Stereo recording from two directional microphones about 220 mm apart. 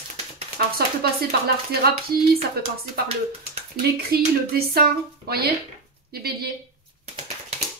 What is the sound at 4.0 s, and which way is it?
Speech, 45° right (ahead or behind).